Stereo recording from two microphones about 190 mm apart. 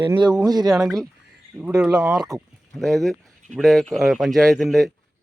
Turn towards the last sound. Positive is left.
turn(degrees=0)  # may be behind; listen again after turning